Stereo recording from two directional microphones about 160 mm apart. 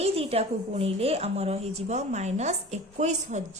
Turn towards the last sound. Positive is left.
turn(degrees=-45)  # may be behind; listen again after turning